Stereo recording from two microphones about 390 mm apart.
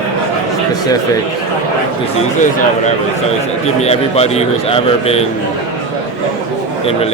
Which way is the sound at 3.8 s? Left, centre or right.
Centre.